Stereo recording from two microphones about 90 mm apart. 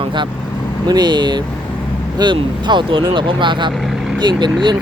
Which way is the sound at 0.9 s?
55° right (ahead or behind).